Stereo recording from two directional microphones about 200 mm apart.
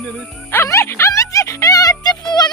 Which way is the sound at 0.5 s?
15° left (ahead or behind).